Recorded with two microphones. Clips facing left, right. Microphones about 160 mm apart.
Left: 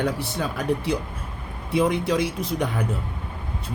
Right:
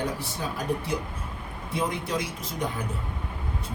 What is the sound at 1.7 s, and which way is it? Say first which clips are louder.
Speech: left 8 dB; 70° left (ahead or behind).